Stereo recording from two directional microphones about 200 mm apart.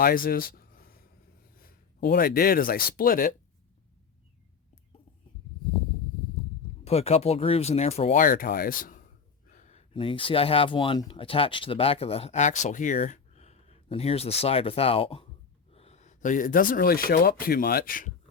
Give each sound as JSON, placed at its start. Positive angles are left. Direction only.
{"t": 0.0, "sound": "a sound", "side_deg": 45}
{"t": 1.5, "sound": "speech", "side_deg": 50}
{"t": 6.8, "sound": "speech", "side_deg": 30}